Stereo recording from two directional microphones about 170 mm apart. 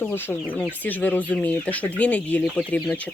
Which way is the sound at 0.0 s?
10° left (ahead or behind).